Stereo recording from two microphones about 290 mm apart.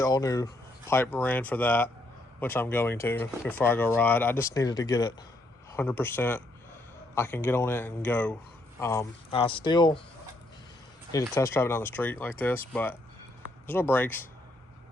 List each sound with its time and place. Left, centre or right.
0.0 s speech: centre
11.3 s speech: centre